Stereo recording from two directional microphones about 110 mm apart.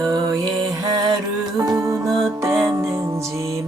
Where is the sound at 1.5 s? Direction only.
30° right (ahead or behind).